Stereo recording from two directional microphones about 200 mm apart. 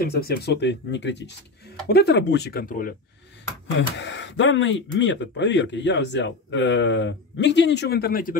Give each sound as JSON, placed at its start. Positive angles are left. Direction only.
{"t": 0.0, "sound": "speech", "side_deg": 50}
{"t": 3.7, "sound": "speech", "side_deg": 65}